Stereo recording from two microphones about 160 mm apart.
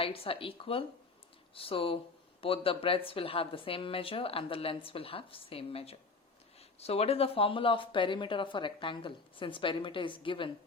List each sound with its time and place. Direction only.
0.0 s speech: 35° left (ahead or behind)